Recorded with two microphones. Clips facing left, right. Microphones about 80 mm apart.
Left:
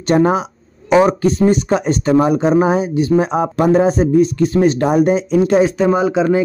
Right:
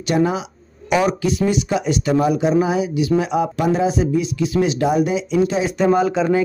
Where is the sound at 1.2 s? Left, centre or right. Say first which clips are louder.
Left 5 dB; left.